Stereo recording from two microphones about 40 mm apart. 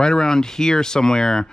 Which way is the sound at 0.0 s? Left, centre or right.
Centre.